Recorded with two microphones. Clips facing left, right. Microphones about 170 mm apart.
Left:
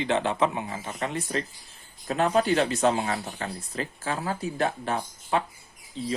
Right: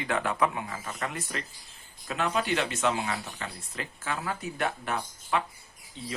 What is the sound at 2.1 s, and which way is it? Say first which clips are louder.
Speech: left 6 dB; 40° left (ahead or behind).